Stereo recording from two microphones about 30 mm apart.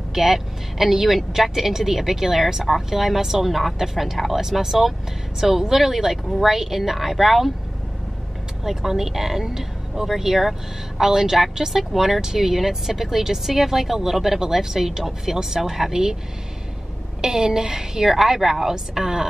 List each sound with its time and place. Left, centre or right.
0.1 s speech: centre
8.6 s speech: centre
17.2 s speech: right